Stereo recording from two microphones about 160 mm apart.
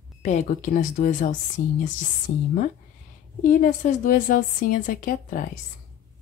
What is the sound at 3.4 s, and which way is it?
A woman's voice, 55° left (ahead or behind).